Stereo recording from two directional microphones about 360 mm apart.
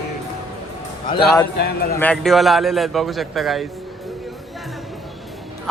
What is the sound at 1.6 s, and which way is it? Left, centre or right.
Speech, left.